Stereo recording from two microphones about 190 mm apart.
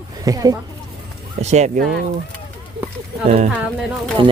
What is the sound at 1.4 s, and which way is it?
Speech, 35° right (ahead or behind).